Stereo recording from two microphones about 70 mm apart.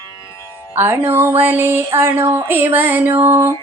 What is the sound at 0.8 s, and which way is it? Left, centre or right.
Female singing, right.